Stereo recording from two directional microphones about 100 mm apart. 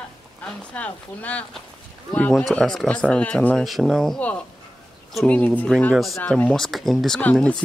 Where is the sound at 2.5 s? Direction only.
5° left (ahead or behind).